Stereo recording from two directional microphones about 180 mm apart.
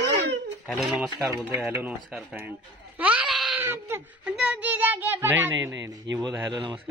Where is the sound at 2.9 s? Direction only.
10° right (ahead or behind).